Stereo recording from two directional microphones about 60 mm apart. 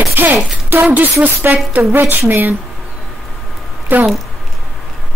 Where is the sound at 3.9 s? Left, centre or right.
Right.